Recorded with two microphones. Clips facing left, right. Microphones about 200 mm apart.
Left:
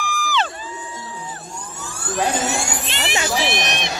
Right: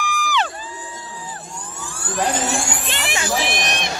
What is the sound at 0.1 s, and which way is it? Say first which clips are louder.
Crowd: even; 15° right (ahead or behind).